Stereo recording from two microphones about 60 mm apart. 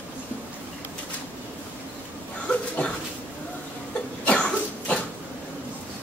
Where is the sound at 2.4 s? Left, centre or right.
Centre.